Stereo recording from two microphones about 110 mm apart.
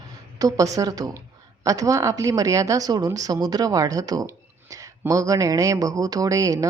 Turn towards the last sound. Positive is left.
turn(degrees=-30)  # may be behind; listen again after turning